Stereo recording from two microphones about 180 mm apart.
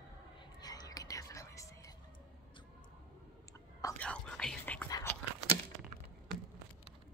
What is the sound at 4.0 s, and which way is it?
Whispering, 5° left (ahead or behind).